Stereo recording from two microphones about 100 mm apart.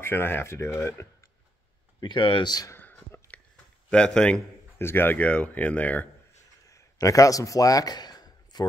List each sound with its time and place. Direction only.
0.0 s speech: 25° left (ahead or behind)
2.0 s speech: 55° left (ahead or behind)
2.7 s a sound: 20° left (ahead or behind)
3.9 s speech: 10° left (ahead or behind)
4.7 s speech: 20° left (ahead or behind)
6.7 s a sound: 35° left (ahead or behind)